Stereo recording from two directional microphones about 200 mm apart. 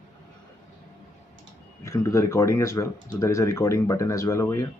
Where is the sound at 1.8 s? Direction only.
15° left (ahead or behind).